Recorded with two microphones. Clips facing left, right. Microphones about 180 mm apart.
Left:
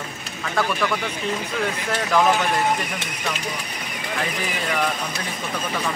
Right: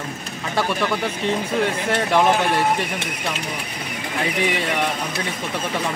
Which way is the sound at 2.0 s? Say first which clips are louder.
Right 1 dB; 25° right (ahead or behind).